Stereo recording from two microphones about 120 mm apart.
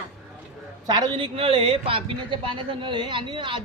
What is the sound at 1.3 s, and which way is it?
A man's voice, 50° right (ahead or behind).